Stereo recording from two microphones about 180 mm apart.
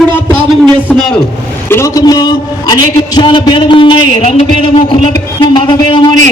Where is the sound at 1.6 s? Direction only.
15° left (ahead or behind).